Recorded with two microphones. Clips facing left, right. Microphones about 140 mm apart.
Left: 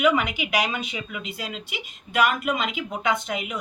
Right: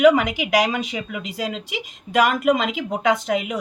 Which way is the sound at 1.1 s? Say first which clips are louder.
Right 6 dB; 90° right.